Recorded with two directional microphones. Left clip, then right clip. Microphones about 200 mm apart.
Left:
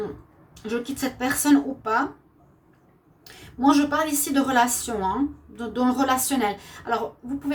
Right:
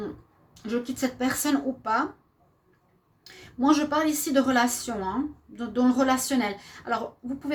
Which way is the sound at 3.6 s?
40° right (ahead or behind).